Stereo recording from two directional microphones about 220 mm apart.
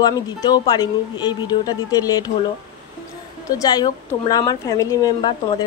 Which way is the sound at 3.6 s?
15° left (ahead or behind).